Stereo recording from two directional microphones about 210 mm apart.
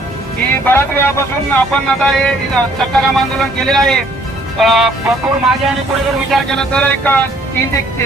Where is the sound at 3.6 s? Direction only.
Centre (ahead or behind).